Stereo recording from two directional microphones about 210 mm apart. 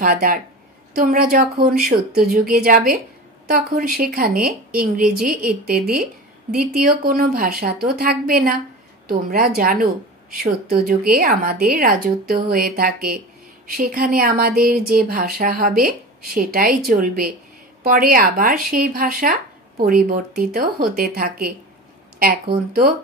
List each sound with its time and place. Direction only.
0.0 s speech: 40° right (ahead or behind)
22.7 s speech: 45° right (ahead or behind)